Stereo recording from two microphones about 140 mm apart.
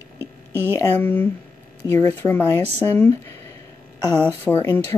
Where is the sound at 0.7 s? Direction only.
15° left (ahead or behind).